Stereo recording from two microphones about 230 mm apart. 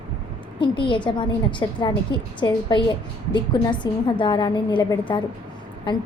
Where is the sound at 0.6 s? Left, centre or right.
Left.